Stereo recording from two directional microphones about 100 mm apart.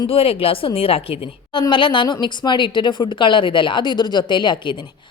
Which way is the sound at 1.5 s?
50° left (ahead or behind).